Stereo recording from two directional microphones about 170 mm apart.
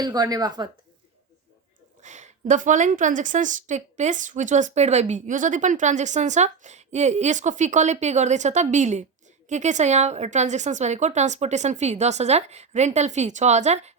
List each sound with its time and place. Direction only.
0.0 s speech: 25° right (ahead or behind)
2.0 s a woman's voice: 45° right (ahead or behind)